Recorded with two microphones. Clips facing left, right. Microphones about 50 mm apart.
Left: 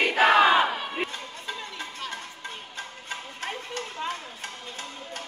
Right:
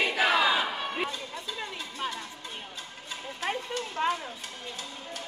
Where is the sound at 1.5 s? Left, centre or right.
Left.